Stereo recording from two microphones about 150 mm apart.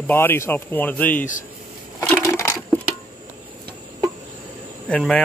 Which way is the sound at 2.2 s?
20° left (ahead or behind).